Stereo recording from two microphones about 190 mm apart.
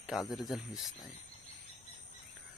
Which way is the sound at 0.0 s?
Centre (ahead or behind).